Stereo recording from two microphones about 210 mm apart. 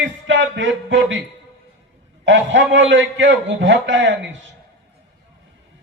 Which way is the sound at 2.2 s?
60° right (ahead or behind).